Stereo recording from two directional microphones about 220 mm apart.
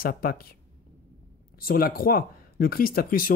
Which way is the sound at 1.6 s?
40° left (ahead or behind).